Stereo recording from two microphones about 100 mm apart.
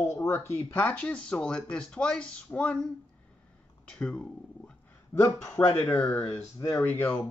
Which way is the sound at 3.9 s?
10° left (ahead or behind).